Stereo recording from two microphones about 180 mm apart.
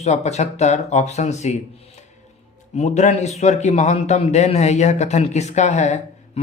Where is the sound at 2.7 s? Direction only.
40° left (ahead or behind).